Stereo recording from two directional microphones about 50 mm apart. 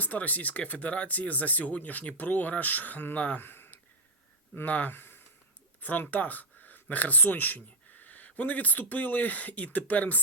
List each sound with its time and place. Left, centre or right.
0.0 s speech: left
3.4 s a sound: left
4.5 s speech: left
5.8 s speech: left